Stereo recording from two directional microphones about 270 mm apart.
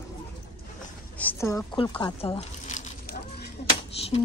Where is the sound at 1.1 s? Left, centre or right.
Centre; by 3.2 s left.